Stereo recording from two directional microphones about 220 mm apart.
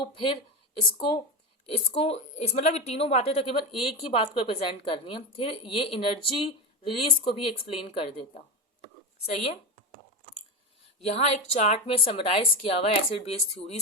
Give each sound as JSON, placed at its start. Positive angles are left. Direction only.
{"t": 0.1, "sound": "a woman's voice", "side_deg": 25}
{"t": 11.0, "sound": "a woman's voice", "side_deg": 30}